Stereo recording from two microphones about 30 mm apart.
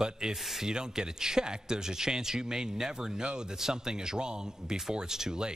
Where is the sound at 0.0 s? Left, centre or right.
Right.